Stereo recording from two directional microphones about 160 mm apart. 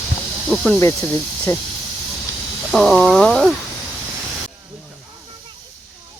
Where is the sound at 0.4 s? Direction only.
5° left (ahead or behind).